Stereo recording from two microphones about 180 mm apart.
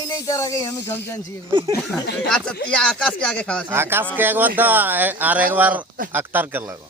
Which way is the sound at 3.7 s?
10° right (ahead or behind).